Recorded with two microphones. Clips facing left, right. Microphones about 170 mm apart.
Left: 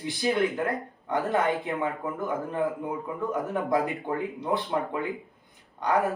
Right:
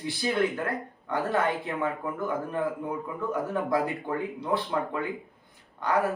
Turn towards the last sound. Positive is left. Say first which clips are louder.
# left 1 dB
turn(degrees=20)  # may be behind; listen again after turning